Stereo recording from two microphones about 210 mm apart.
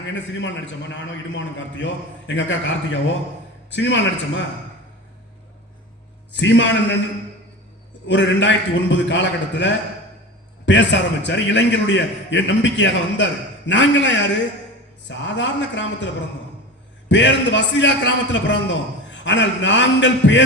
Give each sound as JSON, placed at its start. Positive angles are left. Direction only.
{"t": 0.1, "sound": "a man's voice", "side_deg": 60}
{"t": 6.3, "sound": "a man's voice", "side_deg": 60}
{"t": 8.0, "sound": "a man's voice", "side_deg": 60}
{"t": 17.1, "sound": "a man's voice", "side_deg": 60}